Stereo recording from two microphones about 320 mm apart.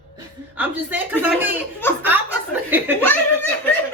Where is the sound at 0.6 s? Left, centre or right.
Centre.